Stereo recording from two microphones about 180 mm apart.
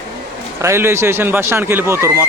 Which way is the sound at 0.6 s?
15° right (ahead or behind).